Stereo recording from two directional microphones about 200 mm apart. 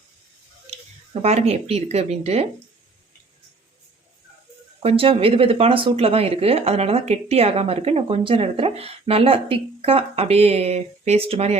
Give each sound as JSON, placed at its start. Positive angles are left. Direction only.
{"t": 1.2, "sound": "speech", "side_deg": -35}
{"t": 4.8, "sound": "speech", "side_deg": -30}